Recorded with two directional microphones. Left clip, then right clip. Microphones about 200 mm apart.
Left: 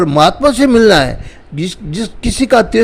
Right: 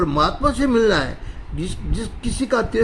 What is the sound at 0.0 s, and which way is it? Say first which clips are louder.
A man's voice: left 9 dB; 35° left (ahead or behind).